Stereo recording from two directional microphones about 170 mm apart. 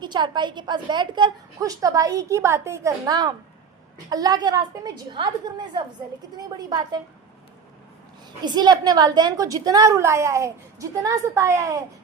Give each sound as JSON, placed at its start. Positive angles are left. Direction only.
{"t": 0.0, "sound": "a woman's voice", "side_deg": -25}
{"t": 8.4, "sound": "a woman's voice", "side_deg": -25}